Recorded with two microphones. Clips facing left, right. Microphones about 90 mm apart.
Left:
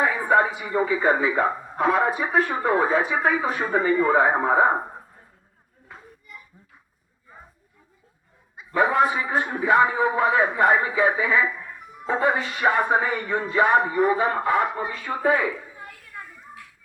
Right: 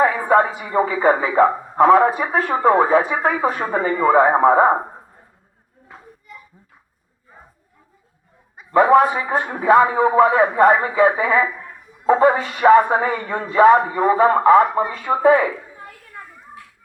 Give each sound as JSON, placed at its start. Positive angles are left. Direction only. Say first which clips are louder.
{"t": 0.0, "sound": "a woman's voice", "louder": "right 5 dB", "side_deg": -45}
{"t": 8.5, "sound": "a man's voice", "louder": "right 7 dB", "side_deg": -50}
{"t": 13.0, "sound": "a man's voice", "louder": "right 4 dB", "side_deg": -35}
{"t": 13.3, "sound": "a man's voice", "louder": "right 7 dB", "side_deg": -45}
{"t": 14.2, "sound": "a man's voice", "louder": "right 9 dB", "side_deg": -55}
{"t": 15.0, "sound": "speech", "louder": "right 8 dB", "side_deg": -65}